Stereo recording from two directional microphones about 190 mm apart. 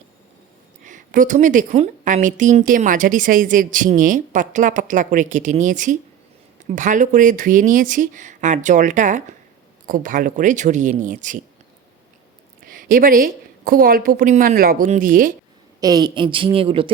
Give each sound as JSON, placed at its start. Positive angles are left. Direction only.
{"t": 0.9, "sound": "a woman's voice", "side_deg": -45}
{"t": 12.6, "sound": "a woman's voice", "side_deg": -45}
{"t": 15.8, "sound": "speech", "side_deg": -20}